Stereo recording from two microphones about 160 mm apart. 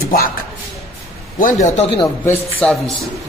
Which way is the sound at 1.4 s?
50° left (ahead or behind).